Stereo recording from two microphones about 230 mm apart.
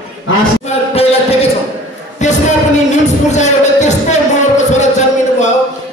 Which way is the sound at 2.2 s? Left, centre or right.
Left.